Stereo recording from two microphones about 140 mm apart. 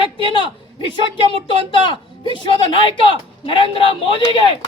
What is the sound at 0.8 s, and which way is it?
A woman's voice, 35° left (ahead or behind).